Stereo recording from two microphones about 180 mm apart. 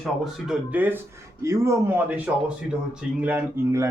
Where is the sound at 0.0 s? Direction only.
5° right (ahead or behind).